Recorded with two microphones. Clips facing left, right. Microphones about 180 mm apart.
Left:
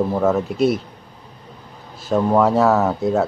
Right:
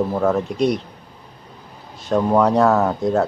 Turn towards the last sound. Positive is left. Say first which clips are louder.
# even
turn(degrees=5)  # may be behind; listen again after turning